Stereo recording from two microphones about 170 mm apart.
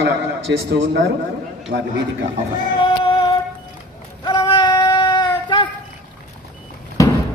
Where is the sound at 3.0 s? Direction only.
30° left (ahead or behind).